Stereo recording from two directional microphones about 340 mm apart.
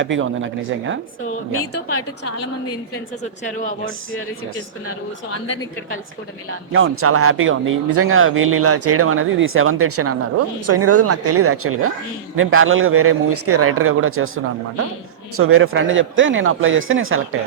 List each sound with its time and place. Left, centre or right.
0.0 s speech: right
1.5 s a woman's voice: left
6.7 s speech: right